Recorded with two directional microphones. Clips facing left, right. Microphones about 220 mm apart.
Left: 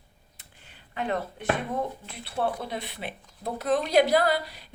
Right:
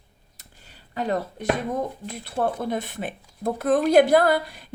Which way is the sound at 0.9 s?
40° right (ahead or behind).